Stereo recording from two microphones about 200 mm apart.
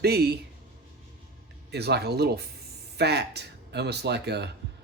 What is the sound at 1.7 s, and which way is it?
Speech, 55° right (ahead or behind).